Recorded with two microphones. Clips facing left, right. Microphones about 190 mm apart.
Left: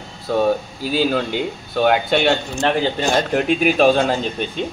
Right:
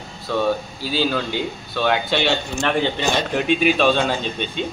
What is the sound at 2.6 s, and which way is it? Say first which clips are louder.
Speech: left 1 dB; 40° left (ahead or behind).